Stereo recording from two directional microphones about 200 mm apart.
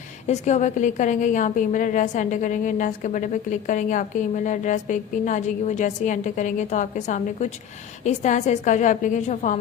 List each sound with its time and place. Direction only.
0.3 s a woman's voice: 35° left (ahead or behind)